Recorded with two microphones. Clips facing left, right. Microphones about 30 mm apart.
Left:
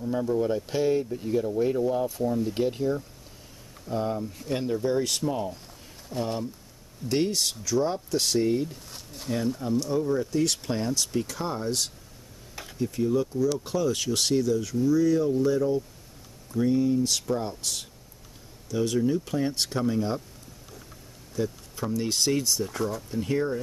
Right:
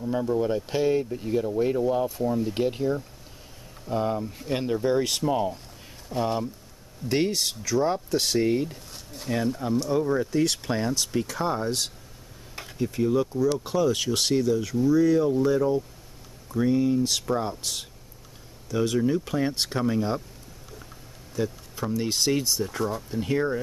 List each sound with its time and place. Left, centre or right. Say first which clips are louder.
0.0 s speech: right 1 dB; centre
8.9 s speech: right 1 dB; centre
9.3 s speech: right 1 dB; centre
21.4 s speech: right 1 dB; centre